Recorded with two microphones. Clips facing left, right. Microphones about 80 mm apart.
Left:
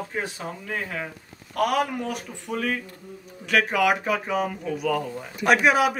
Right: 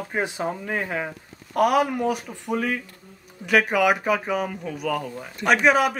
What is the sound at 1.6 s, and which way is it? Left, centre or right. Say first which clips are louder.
Speech: right 4 dB; centre.